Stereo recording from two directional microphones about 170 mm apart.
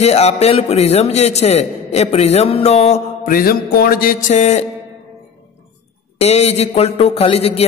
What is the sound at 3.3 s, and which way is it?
Speech, 55° left (ahead or behind).